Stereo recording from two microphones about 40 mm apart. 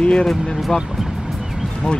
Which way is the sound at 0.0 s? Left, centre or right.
Left.